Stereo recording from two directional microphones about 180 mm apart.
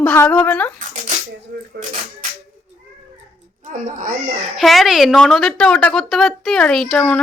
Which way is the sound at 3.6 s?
45° right (ahead or behind).